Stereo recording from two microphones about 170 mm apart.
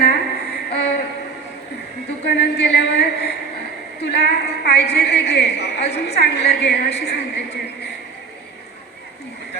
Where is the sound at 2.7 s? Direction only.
75° left (ahead or behind).